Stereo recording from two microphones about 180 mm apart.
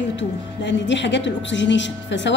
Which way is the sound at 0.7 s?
85° left.